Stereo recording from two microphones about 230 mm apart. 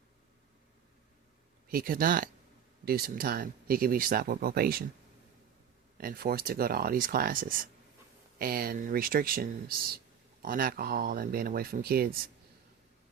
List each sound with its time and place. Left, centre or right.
1.7 s speech: right
6.0 s speech: right